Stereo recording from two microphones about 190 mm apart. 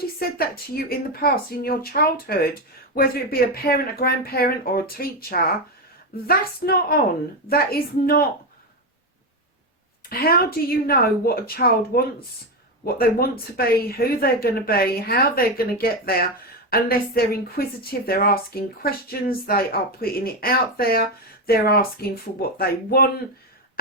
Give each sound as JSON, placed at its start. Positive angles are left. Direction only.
{"t": 0.2, "sound": "speech", "side_deg": 50}
{"t": 10.1, "sound": "speech", "side_deg": 55}